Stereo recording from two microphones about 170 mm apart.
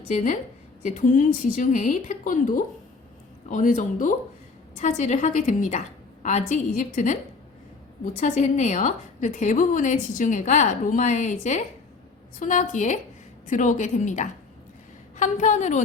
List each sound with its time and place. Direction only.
0.8 s a woman's voice: 50° left (ahead or behind)